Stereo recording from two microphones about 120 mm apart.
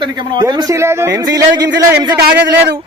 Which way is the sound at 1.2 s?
35° right (ahead or behind).